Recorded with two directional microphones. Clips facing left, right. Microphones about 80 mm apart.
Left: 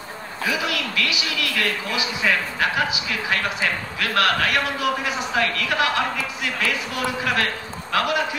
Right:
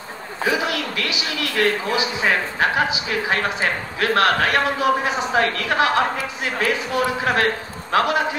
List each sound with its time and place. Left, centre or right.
0.4 s a man's voice: right